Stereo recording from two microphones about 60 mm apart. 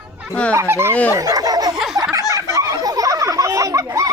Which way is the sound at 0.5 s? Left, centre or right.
Right.